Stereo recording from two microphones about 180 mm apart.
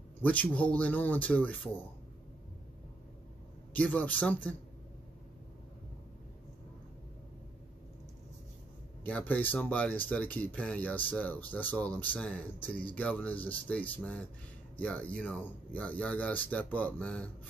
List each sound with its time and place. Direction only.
0.2 s speech: 10° left (ahead or behind)
3.7 s speech: 10° left (ahead or behind)
9.0 s speech: 10° left (ahead or behind)